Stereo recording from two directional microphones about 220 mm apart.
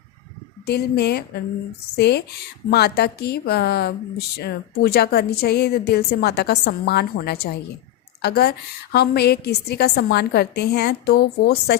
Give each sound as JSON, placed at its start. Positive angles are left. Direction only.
{"t": 0.6, "sound": "a woman's voice", "side_deg": 45}